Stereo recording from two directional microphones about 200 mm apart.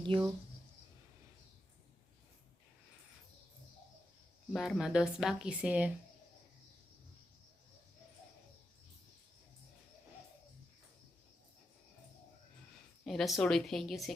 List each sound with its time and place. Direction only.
0.0 s speech: 25° right (ahead or behind)
4.5 s speech: centre (ahead or behind)
13.1 s speech: centre (ahead or behind)